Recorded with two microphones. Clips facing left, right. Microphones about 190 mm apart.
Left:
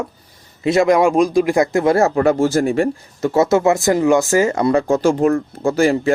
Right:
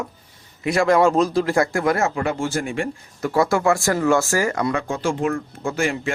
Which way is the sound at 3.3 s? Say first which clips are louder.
Left 4 dB; 25° left (ahead or behind).